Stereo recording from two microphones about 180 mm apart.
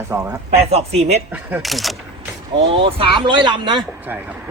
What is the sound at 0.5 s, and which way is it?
Speech, 35° right (ahead or behind).